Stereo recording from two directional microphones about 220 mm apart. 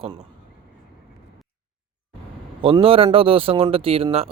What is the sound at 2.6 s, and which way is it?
Speech, 25° right (ahead or behind).